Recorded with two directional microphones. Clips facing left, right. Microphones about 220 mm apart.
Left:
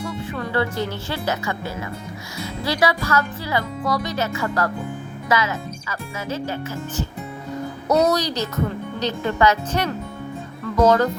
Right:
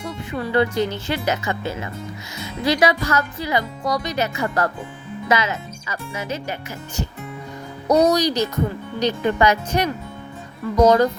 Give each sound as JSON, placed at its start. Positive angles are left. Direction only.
{"t": 0.3, "sound": "a woman's voice", "side_deg": -15}
{"t": 7.9, "sound": "a woman's voice", "side_deg": -15}